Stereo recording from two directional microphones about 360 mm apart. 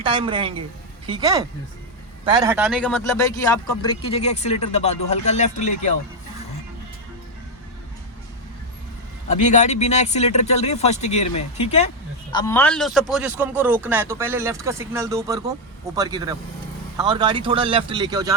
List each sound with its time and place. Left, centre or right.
0.0 s a man's voice: centre
9.4 s a man's voice: centre
12.3 s speech: centre